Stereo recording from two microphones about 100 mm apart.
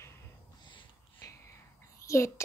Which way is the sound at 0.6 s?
55° left (ahead or behind).